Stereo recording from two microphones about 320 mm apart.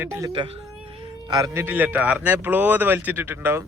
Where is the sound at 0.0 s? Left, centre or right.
Centre.